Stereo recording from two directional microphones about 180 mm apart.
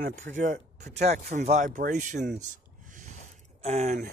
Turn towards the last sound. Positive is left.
turn(degrees=-40)  # may be behind; listen again after turning